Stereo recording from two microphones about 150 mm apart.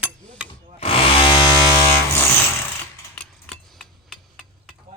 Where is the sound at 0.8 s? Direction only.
35° left (ahead or behind).